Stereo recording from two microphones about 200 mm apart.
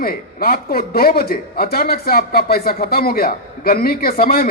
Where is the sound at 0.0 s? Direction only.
50° left (ahead or behind).